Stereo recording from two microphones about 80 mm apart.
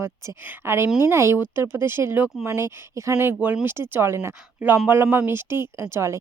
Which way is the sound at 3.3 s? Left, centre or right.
Right.